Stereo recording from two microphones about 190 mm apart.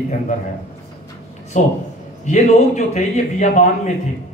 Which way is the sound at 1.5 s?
40° left (ahead or behind).